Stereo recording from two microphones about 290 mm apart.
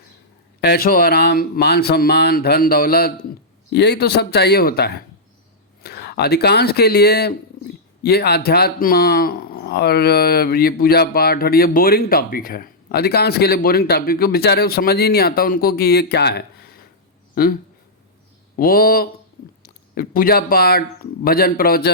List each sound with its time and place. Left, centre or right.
0.6 s speech: left